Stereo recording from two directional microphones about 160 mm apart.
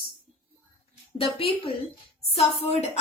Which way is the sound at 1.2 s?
35° left (ahead or behind).